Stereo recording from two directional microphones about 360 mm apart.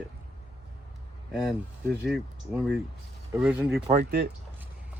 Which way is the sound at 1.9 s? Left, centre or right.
Centre.